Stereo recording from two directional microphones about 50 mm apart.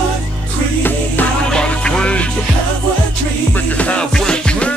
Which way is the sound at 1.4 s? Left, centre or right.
Centre.